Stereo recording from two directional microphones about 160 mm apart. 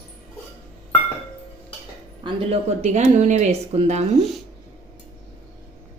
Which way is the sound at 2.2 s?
40° right (ahead or behind).